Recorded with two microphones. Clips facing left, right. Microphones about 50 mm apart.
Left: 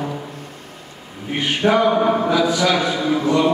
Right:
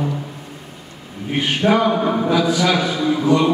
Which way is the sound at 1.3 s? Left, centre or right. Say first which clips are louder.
Even; centre.